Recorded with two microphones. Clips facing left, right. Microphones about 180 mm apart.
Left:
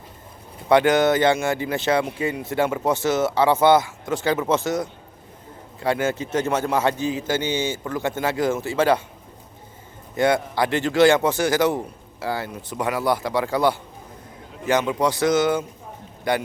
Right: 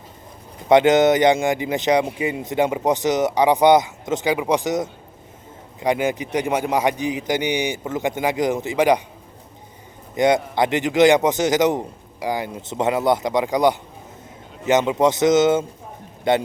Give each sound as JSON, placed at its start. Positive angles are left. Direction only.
{"t": 0.7, "sound": "speech", "side_deg": -20}
{"t": 10.2, "sound": "speech", "side_deg": -20}